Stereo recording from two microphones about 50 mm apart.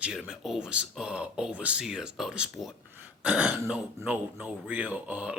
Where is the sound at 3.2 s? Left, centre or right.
Right.